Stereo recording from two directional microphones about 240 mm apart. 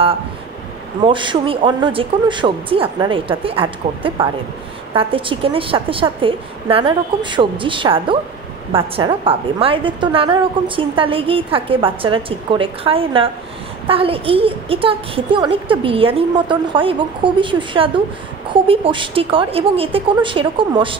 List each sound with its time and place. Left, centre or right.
1.0 s a woman's voice: centre